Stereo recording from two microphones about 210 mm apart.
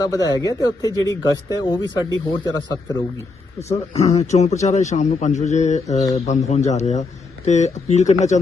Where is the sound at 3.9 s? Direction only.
30° left (ahead or behind).